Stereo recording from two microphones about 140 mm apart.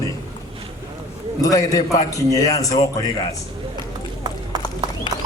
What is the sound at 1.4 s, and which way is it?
A man's voice, 25° left (ahead or behind).